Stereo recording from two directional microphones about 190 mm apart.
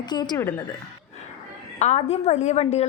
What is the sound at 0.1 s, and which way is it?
Speech, 20° left (ahead or behind).